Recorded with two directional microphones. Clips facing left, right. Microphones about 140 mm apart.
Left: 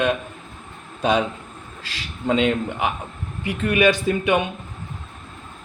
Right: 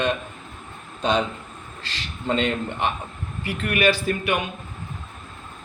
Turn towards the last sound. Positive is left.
turn(degrees=20)  # may be behind; listen again after turning